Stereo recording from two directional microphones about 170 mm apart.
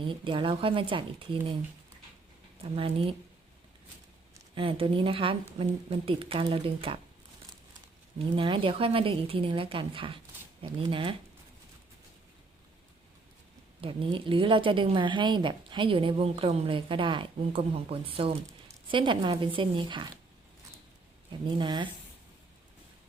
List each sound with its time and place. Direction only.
0.0 s speech: 30° right (ahead or behind)
2.7 s a woman's voice: 35° right (ahead or behind)
4.5 s a woman's voice: 30° right (ahead or behind)
8.4 s a woman's voice: 30° right (ahead or behind)
13.8 s a woman's voice: 30° right (ahead or behind)
21.6 s speech: 25° right (ahead or behind)